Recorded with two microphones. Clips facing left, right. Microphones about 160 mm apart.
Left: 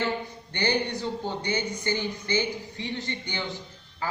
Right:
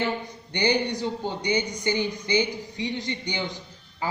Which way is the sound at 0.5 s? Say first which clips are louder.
Right 3 dB; 15° right (ahead or behind).